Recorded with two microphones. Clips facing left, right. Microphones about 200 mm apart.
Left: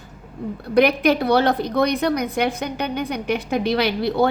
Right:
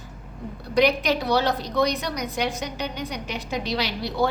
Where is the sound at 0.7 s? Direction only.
55° left (ahead or behind).